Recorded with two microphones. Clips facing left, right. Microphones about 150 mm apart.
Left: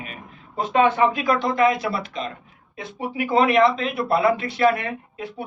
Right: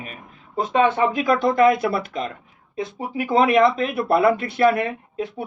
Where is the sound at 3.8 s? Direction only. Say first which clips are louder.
Right 2 dB; 55° right (ahead or behind).